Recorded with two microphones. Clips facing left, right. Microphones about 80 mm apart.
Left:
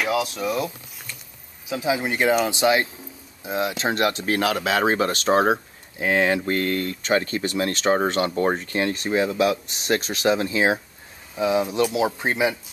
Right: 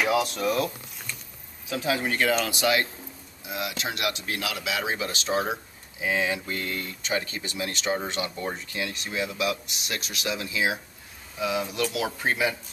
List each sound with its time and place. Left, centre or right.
0.0 s speech: centre
1.7 s speech: centre